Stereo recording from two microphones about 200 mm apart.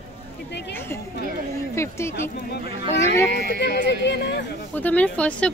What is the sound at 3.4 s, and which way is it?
Speech, 60° left (ahead or behind).